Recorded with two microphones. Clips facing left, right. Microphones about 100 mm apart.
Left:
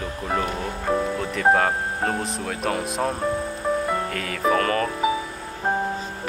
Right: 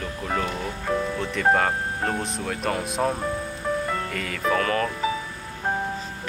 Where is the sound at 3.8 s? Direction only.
15° left (ahead or behind).